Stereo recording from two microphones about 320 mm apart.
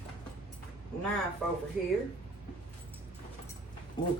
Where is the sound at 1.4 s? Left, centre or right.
Centre.